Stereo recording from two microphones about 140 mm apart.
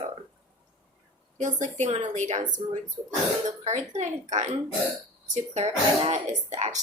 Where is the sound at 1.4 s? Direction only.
60° right (ahead or behind).